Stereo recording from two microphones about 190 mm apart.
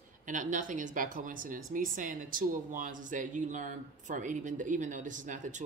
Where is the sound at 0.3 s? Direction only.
45° right (ahead or behind).